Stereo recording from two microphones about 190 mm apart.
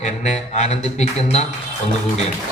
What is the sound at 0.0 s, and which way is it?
A man's voice, 40° left (ahead or behind).